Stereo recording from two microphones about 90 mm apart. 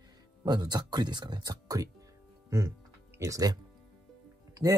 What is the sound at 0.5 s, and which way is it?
Speech, 50° right (ahead or behind).